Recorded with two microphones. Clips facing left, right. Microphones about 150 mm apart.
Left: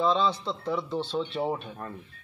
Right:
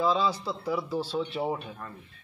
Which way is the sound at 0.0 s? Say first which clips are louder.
Left 1 dB; 5° right (ahead or behind).